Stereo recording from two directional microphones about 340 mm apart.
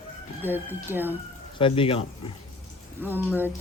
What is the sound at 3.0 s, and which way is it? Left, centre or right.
Speech, centre.